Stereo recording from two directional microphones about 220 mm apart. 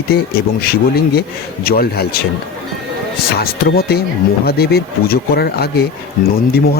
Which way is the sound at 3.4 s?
45° left (ahead or behind).